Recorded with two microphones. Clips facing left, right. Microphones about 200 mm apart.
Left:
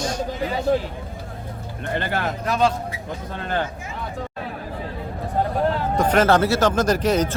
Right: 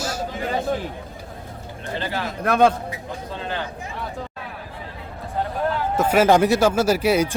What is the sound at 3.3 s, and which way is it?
Speech, 50° left (ahead or behind).